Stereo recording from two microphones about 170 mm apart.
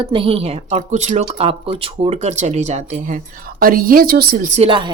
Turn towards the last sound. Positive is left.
turn(degrees=-30)  # may be behind; listen again after turning